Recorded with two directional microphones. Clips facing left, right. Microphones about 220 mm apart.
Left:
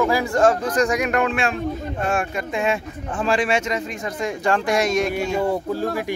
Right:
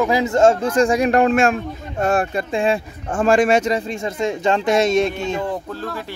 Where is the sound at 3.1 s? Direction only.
45° right (ahead or behind); by 5.1 s 25° right (ahead or behind).